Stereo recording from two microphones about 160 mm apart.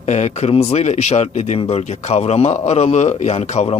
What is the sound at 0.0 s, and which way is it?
Speech, 45° left (ahead or behind).